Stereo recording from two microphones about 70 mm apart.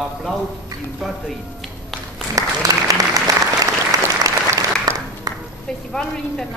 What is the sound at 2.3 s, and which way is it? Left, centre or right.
Applause, right.